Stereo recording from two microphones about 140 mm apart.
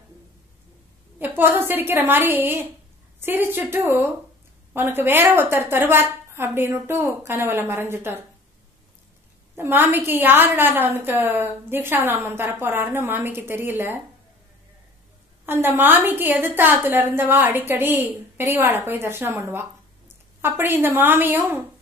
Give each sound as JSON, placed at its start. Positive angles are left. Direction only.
{"t": 1.2, "sound": "a woman's voice", "side_deg": -15}
{"t": 9.6, "sound": "a woman's voice", "side_deg": -15}
{"t": 15.4, "sound": "a woman's voice", "side_deg": -15}